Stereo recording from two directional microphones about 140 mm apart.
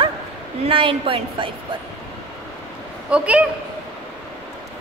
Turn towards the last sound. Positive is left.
turn(degrees=-10)  # may be behind; listen again after turning